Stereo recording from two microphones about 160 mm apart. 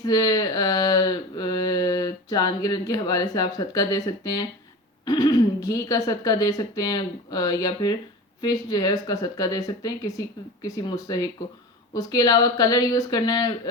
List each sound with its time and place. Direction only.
0.0 s speech: 25° left (ahead or behind)